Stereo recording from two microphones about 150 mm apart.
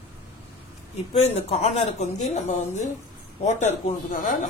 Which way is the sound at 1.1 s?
45° left (ahead or behind).